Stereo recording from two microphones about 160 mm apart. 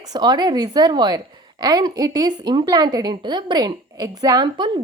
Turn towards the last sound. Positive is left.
turn(degrees=-25)  # may be behind; listen again after turning